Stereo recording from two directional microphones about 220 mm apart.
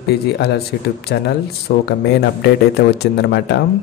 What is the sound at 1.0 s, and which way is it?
Speech, 45° left (ahead or behind).